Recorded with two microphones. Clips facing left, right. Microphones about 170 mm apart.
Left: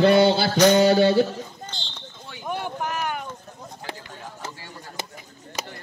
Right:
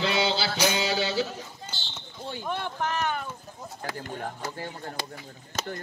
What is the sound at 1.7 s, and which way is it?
Basketball bounce, 5° right (ahead or behind).